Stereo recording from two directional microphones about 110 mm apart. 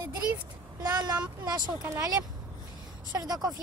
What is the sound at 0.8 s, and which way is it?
Speech, 35° right (ahead or behind).